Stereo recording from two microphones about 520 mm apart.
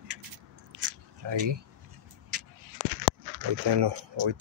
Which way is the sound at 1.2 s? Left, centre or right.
Right.